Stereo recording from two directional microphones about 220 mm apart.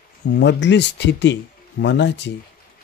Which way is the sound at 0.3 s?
55° left (ahead or behind).